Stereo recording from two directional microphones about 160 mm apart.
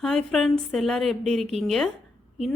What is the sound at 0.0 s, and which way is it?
A woman's voice, 5° left (ahead or behind).